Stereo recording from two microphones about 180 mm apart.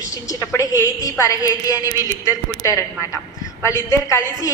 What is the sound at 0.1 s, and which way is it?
A woman's voice, 20° left (ahead or behind).